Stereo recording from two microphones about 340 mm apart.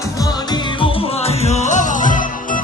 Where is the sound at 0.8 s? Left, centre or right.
Centre.